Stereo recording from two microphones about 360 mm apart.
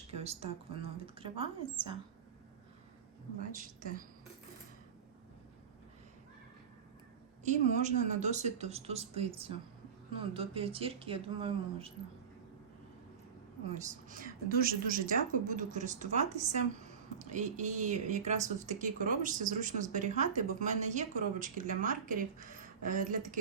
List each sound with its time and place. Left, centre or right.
0.1 s a woman's voice: centre
3.5 s speech: right
7.4 s a woman's voice: centre
13.7 s speech: right